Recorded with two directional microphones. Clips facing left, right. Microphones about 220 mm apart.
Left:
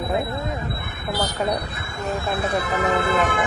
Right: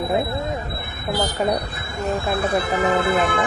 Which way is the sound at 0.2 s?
30° right (ahead or behind).